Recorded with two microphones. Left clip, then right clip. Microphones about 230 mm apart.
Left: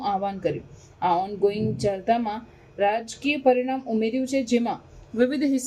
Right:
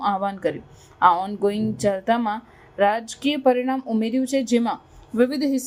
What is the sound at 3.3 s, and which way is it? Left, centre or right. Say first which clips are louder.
Speech: right 1 dB; right.